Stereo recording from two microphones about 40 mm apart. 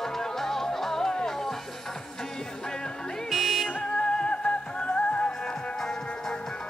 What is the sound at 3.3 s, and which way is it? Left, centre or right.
Music, centre.